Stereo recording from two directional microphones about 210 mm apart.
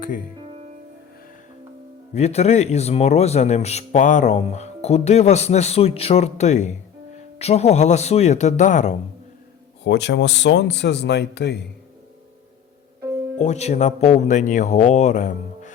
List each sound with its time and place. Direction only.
0.3 s music: 25° right (ahead or behind)
2.1 s speech: 30° left (ahead or behind)
9.8 s speech: 55° left (ahead or behind)
13.4 s speech: 30° left (ahead or behind)